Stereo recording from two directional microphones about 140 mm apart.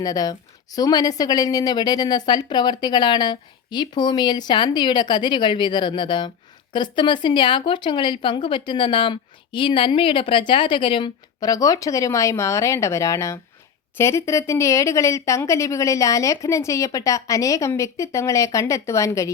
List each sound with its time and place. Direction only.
0.0 s a woman's voice: 25° left (ahead or behind)